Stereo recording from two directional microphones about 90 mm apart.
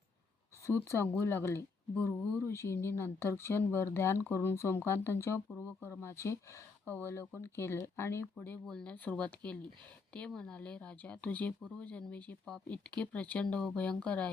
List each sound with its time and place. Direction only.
0.6 s speech: 30° left (ahead or behind)
8.6 s speech: 10° left (ahead or behind)